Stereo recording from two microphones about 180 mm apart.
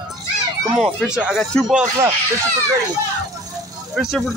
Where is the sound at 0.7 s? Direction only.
Centre (ahead or behind).